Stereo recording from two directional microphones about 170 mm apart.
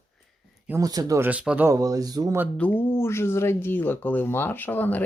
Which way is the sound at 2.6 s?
10° left (ahead or behind).